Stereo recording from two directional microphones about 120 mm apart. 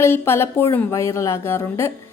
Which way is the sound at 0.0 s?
20° left (ahead or behind).